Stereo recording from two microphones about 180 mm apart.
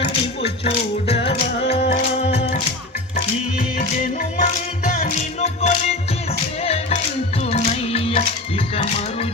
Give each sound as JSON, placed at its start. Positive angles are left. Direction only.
{"t": 0.4, "sound": "music", "side_deg": 35}
{"t": 3.6, "sound": "music", "side_deg": 45}